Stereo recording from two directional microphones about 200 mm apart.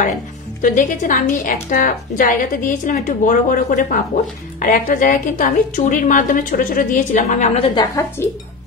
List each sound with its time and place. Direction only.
0.6 s a woman's voice: 40° left (ahead or behind); by 8.3 s 20° left (ahead or behind)